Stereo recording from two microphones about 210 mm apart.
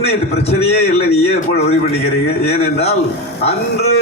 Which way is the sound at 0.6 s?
30° left (ahead or behind).